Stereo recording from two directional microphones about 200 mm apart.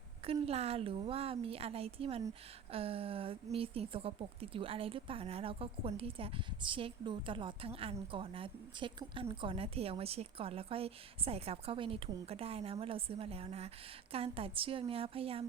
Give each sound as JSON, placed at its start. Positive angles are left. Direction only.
{"t": 0.4, "sound": "a woman's voice", "side_deg": -30}